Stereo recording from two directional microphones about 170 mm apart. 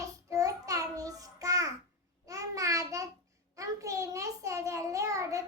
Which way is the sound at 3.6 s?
20° right (ahead or behind).